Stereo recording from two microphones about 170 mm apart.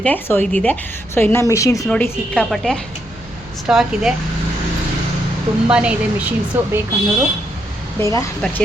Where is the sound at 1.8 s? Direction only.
5° left (ahead or behind).